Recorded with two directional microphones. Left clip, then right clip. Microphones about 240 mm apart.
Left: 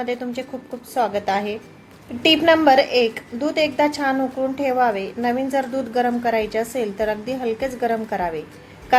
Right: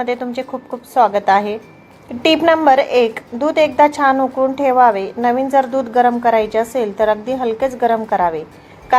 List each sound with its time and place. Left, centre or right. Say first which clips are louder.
0.0 s a woman's voice: right 6 dB; centre